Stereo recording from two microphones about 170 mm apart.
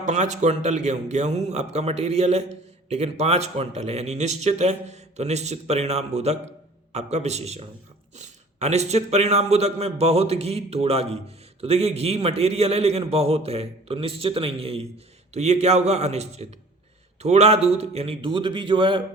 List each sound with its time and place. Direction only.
0.0 s a man's voice: 45° right (ahead or behind); by 19.0 s 30° right (ahead or behind)